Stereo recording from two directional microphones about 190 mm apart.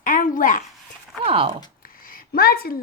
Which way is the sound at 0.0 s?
45° left (ahead or behind).